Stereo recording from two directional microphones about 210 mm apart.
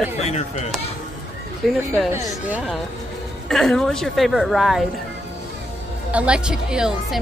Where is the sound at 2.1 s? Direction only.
15° right (ahead or behind).